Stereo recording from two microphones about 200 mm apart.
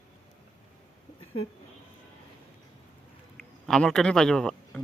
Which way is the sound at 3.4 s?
5° left (ahead or behind).